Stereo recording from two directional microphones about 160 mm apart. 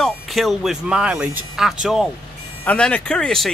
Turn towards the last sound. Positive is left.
turn(degrees=0)  # may be behind; listen again after turning